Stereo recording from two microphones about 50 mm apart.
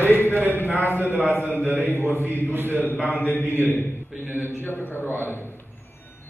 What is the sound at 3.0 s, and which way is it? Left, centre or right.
Mantra, left.